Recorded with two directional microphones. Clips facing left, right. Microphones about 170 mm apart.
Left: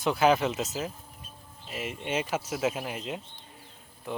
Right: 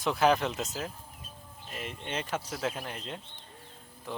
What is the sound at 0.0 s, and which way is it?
Speech, centre (ahead or behind).